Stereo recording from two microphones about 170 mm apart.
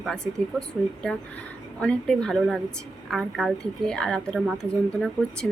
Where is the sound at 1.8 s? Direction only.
5° left (ahead or behind).